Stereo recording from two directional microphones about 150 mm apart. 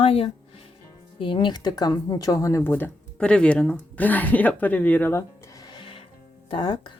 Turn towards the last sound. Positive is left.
turn(degrees=30)  # may be behind; listen again after turning